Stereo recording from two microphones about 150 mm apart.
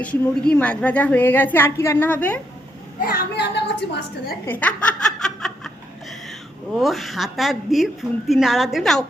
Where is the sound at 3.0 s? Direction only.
90° left.